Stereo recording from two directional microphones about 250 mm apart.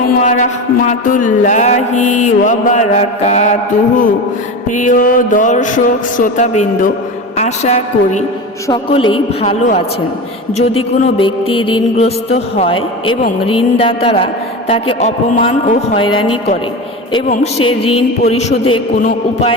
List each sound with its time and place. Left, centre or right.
0.1 s a sound: left
0.9 s mantra: left
4.7 s music: left
7.3 s a woman's voice: left
8.6 s mantra: centre
17.1 s a woman's voice: centre
17.3 s mantra: left